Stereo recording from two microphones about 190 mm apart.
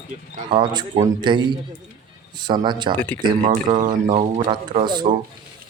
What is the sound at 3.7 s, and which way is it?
Speech, 40° right (ahead or behind).